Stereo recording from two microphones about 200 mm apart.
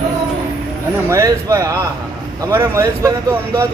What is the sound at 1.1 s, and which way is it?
A man's voice, 15° right (ahead or behind).